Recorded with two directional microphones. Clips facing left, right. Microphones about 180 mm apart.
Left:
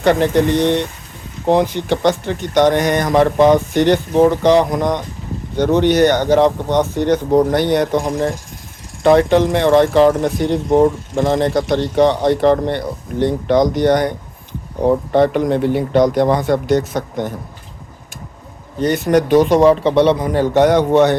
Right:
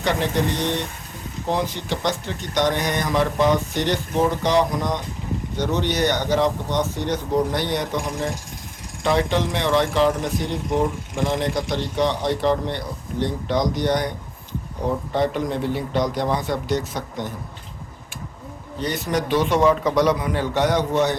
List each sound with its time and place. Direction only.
0.0 s speech: 55° left (ahead or behind)
18.8 s a man's voice: 50° left (ahead or behind)